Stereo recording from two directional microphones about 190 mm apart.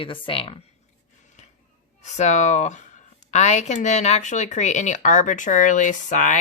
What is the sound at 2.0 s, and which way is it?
Speech, 40° left (ahead or behind).